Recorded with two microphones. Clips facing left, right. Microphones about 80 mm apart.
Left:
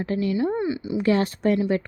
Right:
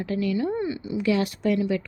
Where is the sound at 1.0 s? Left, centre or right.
Left.